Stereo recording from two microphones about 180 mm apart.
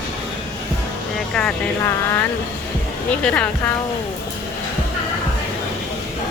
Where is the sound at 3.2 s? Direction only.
5° left (ahead or behind).